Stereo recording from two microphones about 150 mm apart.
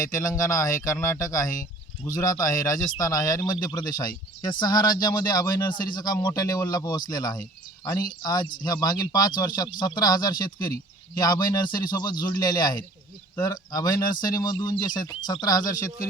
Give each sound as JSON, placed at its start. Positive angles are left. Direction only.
{"t": 0.0, "sound": "speech", "side_deg": 20}